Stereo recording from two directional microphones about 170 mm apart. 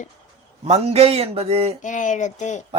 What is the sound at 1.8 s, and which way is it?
Speech, 45° left (ahead or behind).